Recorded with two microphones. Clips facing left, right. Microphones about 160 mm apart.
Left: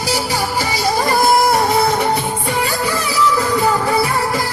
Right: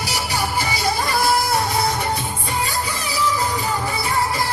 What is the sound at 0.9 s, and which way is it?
Music, 50° left (ahead or behind).